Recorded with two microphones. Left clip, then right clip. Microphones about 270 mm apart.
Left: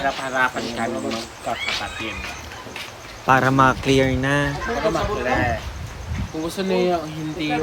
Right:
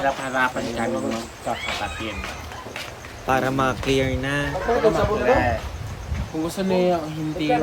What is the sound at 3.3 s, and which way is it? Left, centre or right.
Speech, left.